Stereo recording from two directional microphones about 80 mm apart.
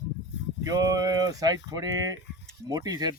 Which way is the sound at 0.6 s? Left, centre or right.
Right.